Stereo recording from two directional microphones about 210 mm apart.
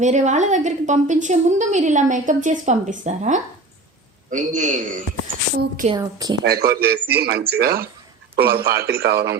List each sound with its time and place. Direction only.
0.0 s a woman's voice: 35° right (ahead or behind)
5.9 s speech: 15° right (ahead or behind)
6.4 s speech: 50° right (ahead or behind)